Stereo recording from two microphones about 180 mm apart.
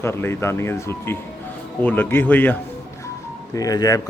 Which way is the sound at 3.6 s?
20° left (ahead or behind).